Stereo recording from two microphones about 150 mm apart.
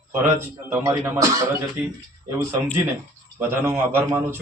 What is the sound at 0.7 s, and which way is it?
Speech, 15° right (ahead or behind).